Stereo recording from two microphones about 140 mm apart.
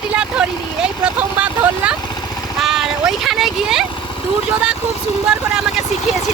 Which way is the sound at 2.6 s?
Centre (ahead or behind).